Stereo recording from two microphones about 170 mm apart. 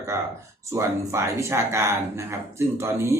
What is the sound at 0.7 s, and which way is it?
Speech, 15° right (ahead or behind).